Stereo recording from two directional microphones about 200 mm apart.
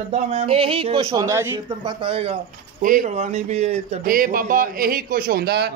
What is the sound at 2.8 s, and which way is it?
Speech, 40° right (ahead or behind).